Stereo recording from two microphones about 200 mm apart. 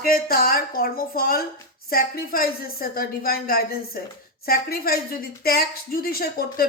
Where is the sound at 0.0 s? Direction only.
50° left (ahead or behind).